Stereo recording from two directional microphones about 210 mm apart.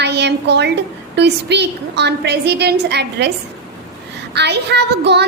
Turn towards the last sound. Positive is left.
turn(degrees=-55)  # may be behind; listen again after turning